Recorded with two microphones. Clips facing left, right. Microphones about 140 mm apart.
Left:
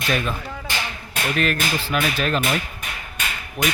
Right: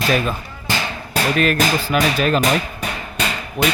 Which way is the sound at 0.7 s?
90° right.